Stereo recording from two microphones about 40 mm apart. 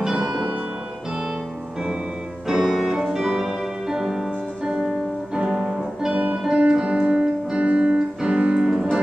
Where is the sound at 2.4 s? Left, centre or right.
Centre.